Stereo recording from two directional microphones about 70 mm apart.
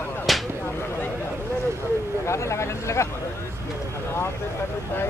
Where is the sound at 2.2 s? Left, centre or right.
Left.